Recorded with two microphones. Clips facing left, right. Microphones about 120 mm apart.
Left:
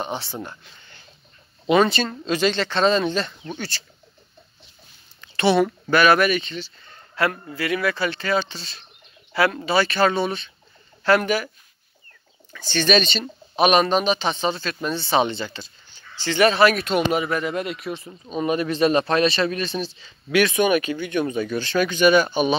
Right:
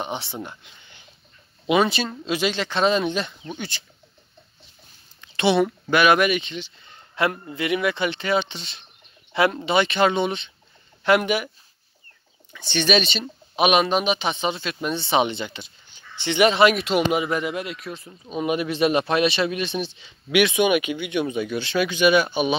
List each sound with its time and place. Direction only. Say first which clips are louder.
0.0 s speech: left 1 dB; 20° right (ahead or behind)
5.2 s speech: left 1 dB; 15° right (ahead or behind)
12.5 s speech: left 1 dB; 20° right (ahead or behind)
12.8 s speech: left 2 dB; 5° right (ahead or behind)
17.6 s speech: left 3 dB; centre (ahead or behind)